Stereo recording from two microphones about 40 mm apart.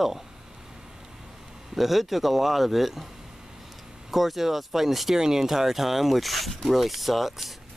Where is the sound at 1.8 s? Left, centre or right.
Centre.